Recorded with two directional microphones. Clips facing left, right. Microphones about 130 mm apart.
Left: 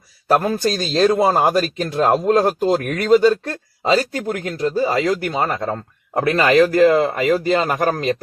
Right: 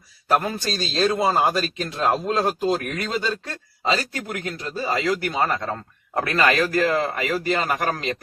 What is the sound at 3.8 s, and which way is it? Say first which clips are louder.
Speech: left 6 dB; 40° left (ahead or behind).